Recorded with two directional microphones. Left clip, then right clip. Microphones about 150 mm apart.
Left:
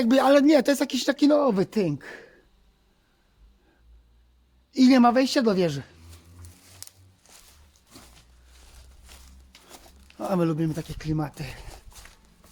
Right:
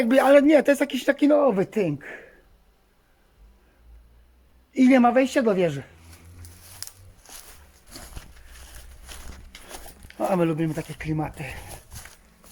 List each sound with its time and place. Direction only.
0.0 s speech: 55° left (ahead or behind)
4.7 s speech: 55° left (ahead or behind)
6.7 s a sound: centre (ahead or behind)
9.0 s walk: 5° left (ahead or behind)
10.2 s speech: 35° left (ahead or behind)